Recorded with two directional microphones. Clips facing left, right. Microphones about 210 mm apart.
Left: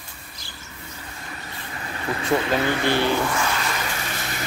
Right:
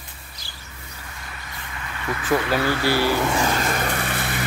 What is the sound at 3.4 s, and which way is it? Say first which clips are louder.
Vehicle: right 4 dB; 40° right (ahead or behind).